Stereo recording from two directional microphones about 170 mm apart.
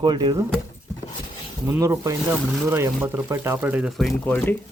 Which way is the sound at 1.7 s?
15° right (ahead or behind).